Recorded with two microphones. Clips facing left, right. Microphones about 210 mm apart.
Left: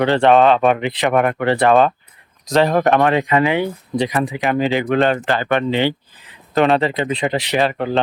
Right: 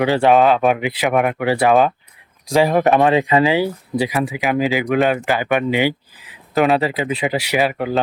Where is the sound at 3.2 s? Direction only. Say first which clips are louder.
Right 1 dB; 30° right (ahead or behind).